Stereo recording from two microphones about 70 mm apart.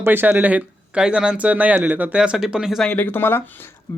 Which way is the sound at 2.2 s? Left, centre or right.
Centre.